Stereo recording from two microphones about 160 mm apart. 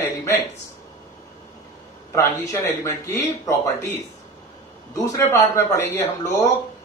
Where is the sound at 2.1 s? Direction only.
20° left (ahead or behind).